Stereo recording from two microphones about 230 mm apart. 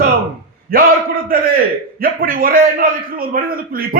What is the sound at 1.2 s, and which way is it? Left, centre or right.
A man's voice, right.